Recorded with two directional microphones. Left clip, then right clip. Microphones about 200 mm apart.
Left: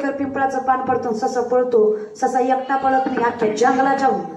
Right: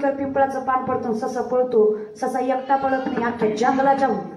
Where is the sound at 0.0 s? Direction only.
15° left (ahead or behind).